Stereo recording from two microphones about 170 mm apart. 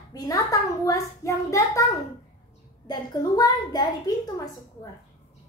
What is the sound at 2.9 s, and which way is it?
Speech, 25° left (ahead or behind).